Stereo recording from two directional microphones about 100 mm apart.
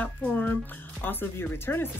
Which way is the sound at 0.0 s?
15° left (ahead or behind).